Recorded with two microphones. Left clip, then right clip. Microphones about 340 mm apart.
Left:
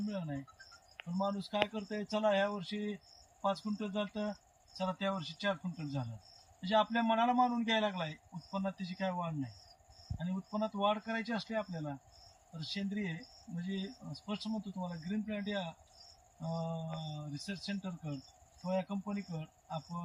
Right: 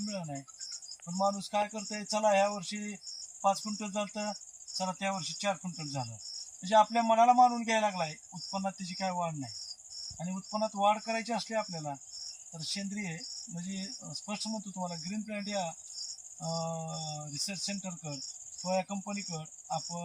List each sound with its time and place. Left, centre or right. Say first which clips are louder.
0.1 s a man's voice: right 2 dB; centre
19.4 s cricket: right 7 dB; centre